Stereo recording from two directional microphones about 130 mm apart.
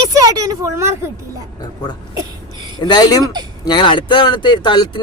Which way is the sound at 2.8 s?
30° left (ahead or behind).